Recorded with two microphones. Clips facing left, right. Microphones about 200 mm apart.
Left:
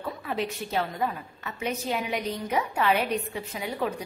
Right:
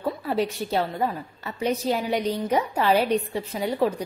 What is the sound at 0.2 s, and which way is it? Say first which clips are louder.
A woman's voice: right 5 dB; 35° right (ahead or behind).